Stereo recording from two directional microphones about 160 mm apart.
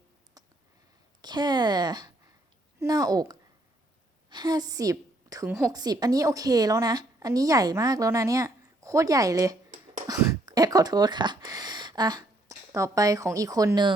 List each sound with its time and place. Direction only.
1.2 s a woman's voice: 25° right (ahead or behind)
5.5 s a woman's voice: 10° right (ahead or behind)
5.7 s a woman's voice: 25° right (ahead or behind)